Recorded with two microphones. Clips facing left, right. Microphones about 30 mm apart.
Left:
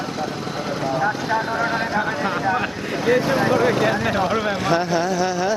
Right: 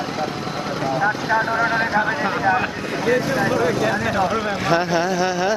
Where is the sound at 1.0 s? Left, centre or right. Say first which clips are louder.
Right 4 dB; centre.